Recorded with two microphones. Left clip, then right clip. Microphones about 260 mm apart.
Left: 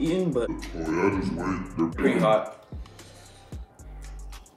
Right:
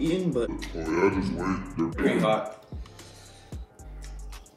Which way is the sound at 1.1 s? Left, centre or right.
Right.